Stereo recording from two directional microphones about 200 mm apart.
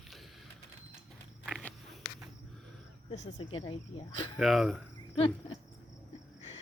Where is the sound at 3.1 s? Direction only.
30° left (ahead or behind).